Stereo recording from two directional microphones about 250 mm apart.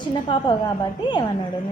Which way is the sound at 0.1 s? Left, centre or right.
Centre.